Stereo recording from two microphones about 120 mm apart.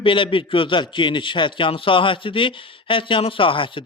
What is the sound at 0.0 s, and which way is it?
A man's voice, 45° left (ahead or behind).